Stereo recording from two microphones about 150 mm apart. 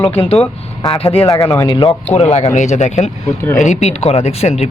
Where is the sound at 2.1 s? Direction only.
50° left (ahead or behind).